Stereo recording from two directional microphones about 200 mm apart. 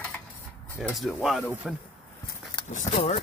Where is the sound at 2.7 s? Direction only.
35° left (ahead or behind).